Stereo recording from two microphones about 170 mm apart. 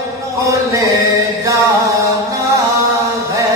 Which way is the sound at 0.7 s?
20° right (ahead or behind).